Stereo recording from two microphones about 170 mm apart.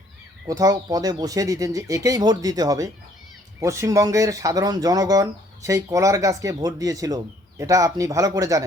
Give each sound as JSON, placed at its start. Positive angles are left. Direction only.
{"t": 0.4, "sound": "speech", "side_deg": -20}